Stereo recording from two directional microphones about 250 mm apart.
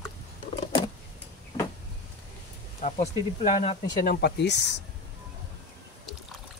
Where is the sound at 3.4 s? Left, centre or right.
Left.